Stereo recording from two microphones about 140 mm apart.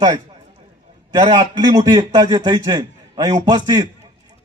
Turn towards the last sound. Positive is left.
turn(degrees=-30)  # may be behind; listen again after turning